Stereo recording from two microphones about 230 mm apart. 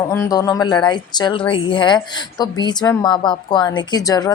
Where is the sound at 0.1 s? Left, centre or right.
Centre.